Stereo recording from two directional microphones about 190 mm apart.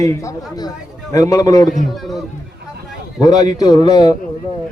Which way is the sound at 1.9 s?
Centre (ahead or behind).